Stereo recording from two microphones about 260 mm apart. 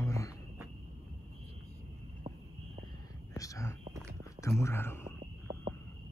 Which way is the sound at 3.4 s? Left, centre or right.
Centre.